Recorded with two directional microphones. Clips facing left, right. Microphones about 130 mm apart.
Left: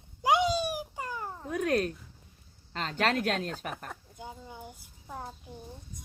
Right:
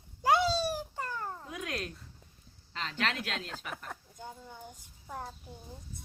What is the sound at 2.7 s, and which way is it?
Speech, 45° left (ahead or behind).